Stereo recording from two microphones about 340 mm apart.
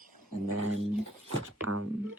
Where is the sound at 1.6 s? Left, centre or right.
Right.